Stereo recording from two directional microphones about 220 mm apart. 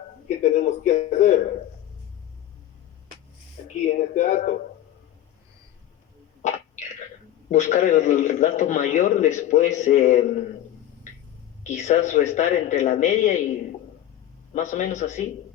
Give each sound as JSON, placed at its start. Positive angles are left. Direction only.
{"t": 0.3, "sound": "a man's voice", "side_deg": 30}
{"t": 3.8, "sound": "a man's voice", "side_deg": 35}
{"t": 6.4, "sound": "a sound", "side_deg": 30}
{"t": 7.5, "sound": "a man's voice", "side_deg": 30}
{"t": 11.6, "sound": "a man's voice", "side_deg": 30}
{"t": 14.5, "sound": "a man's voice", "side_deg": 35}